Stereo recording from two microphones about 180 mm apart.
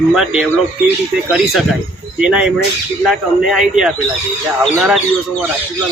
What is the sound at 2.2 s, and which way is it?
Speech, 5° right (ahead or behind).